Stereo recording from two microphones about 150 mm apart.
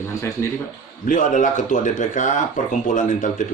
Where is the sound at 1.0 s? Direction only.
60° left (ahead or behind).